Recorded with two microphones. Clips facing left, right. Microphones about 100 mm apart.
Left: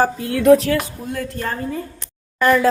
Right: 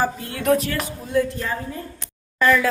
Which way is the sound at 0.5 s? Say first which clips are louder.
Left 7 dB; 80° left.